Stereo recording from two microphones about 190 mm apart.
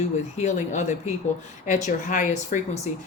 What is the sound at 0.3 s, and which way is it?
Speech, 40° left (ahead or behind).